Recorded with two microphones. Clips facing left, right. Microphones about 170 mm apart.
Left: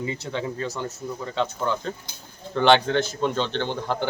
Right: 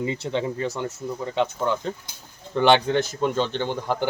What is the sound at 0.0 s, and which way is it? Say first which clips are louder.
Speech: right 3 dB; 20° right (ahead or behind).